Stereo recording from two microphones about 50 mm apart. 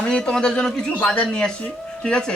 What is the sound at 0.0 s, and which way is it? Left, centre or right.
Speech, centre.